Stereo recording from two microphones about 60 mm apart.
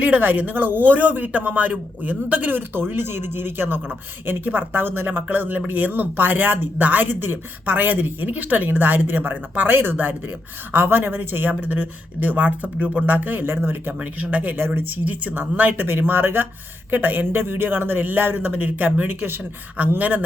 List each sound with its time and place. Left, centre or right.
0.0 s speech: right
15.7 s speech: right